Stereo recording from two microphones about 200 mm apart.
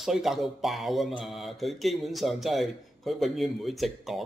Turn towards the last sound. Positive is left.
turn(degrees=0)  # may be behind; listen again after turning